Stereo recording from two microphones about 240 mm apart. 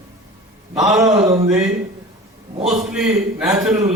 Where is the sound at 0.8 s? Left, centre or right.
Centre.